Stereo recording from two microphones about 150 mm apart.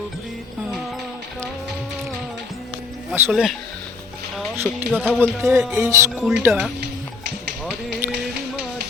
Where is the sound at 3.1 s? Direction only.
5° right (ahead or behind).